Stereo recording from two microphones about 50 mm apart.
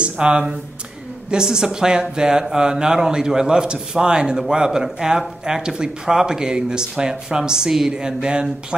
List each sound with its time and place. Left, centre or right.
0.0 s speech: right